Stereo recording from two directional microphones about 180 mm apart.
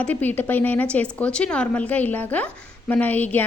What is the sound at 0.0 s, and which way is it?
A woman's voice, 10° left (ahead or behind).